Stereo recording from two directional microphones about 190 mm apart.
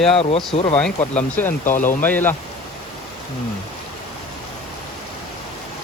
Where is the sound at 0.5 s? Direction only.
30° left (ahead or behind).